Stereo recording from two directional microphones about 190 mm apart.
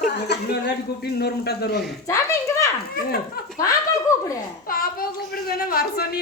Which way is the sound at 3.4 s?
55° left (ahead or behind).